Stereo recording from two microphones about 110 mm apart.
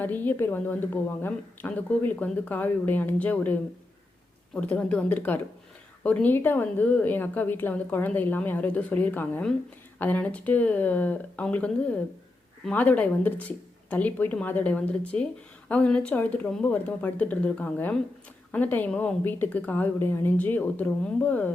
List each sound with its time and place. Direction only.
0.0 s a woman's voice: 15° left (ahead or behind)